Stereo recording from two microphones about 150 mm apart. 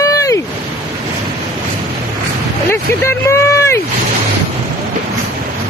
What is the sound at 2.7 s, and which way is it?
Speech, 15° left (ahead or behind).